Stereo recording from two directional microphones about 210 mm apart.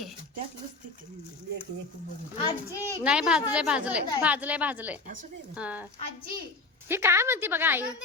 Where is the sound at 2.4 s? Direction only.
15° left (ahead or behind).